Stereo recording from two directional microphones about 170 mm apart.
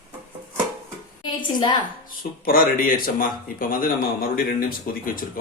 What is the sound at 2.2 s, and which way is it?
Speech, 60° left (ahead or behind).